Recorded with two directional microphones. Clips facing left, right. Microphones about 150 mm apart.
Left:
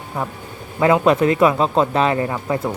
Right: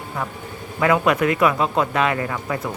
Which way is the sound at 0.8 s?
25° left (ahead or behind).